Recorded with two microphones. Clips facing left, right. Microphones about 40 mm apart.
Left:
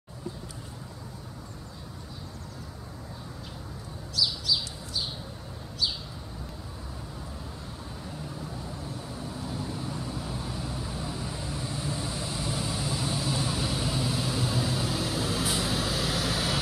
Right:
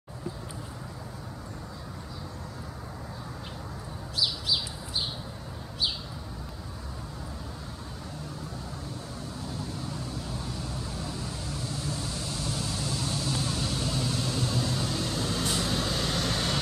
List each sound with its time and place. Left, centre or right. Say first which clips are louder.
4.2 s bird: left 1 dB; right
9.4 s vehicle: left 2 dB; centre